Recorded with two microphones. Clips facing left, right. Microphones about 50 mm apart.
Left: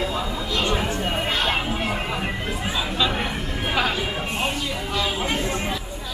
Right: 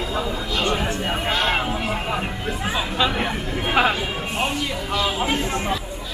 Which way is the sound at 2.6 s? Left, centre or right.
Centre.